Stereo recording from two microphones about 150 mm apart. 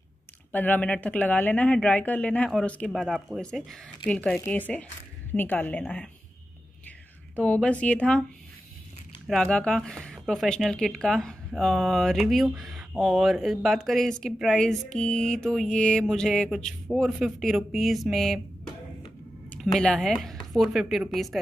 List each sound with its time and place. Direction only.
0.5 s speech: 10° left (ahead or behind)
7.3 s speech: 10° left (ahead or behind)
9.3 s speech: 5° left (ahead or behind)
19.5 s speech: 5° left (ahead or behind)